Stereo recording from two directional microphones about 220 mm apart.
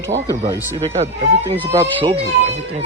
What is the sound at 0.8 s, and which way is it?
Speech, 30° right (ahead or behind).